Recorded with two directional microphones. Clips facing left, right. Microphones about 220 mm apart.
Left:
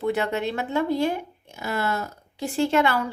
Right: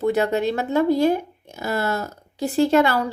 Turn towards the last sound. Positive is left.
turn(degrees=-40)  # may be behind; listen again after turning